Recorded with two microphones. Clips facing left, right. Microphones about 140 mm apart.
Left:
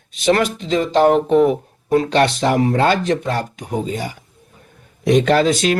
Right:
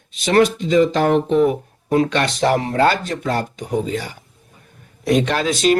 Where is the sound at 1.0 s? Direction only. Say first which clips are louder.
Left 3 dB; 45° left (ahead or behind).